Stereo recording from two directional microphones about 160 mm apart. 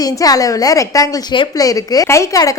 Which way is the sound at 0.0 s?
20° left (ahead or behind).